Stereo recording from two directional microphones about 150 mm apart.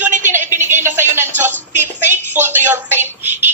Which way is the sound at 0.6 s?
15° right (ahead or behind).